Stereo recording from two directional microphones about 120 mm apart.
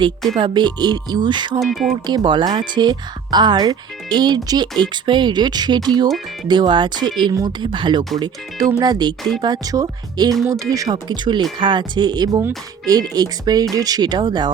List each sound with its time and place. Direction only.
0.3 s speech: 40° right (ahead or behind)
1.6 s speech: centre (ahead or behind)
2.0 s speech: 40° right (ahead or behind)